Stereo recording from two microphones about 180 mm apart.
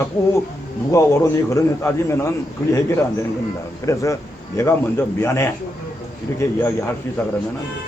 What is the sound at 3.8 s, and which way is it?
A man's voice, 15° left (ahead or behind).